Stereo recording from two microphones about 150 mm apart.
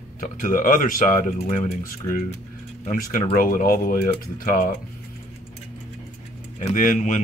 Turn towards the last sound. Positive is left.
turn(degrees=55)  # may be behind; listen again after turning